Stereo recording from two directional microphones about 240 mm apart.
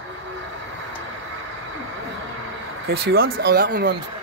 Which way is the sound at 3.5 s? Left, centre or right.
Right.